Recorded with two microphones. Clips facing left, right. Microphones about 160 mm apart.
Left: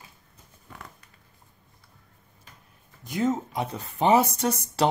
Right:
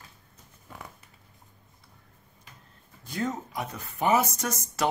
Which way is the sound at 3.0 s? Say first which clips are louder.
Left 6 dB; 20° left (ahead or behind).